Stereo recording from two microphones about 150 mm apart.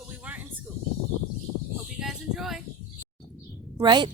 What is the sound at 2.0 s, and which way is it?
Speech, 5° right (ahead or behind).